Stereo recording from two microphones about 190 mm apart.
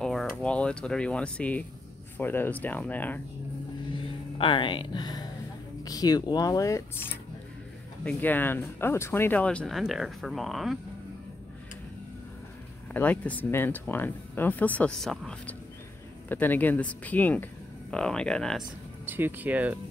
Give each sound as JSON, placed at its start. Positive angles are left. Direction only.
{"t": 0.0, "sound": "speech", "side_deg": 5}
{"t": 4.4, "sound": "speech", "side_deg": 25}
{"t": 12.9, "sound": "speech", "side_deg": 10}
{"t": 19.0, "sound": "speech", "side_deg": -10}